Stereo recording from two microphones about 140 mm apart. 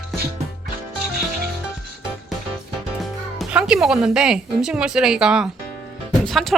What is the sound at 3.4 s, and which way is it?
Speech, 5° right (ahead or behind).